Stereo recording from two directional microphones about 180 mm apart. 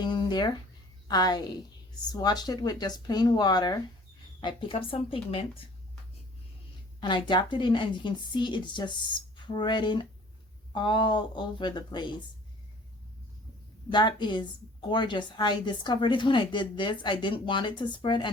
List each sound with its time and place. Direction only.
0.0 s a woman's voice: 25° left (ahead or behind)
7.0 s a woman's voice: 25° left (ahead or behind)
13.9 s a woman's voice: 25° left (ahead or behind)